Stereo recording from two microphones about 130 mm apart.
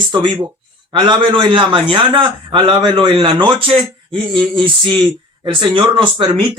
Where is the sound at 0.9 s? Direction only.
35° right (ahead or behind).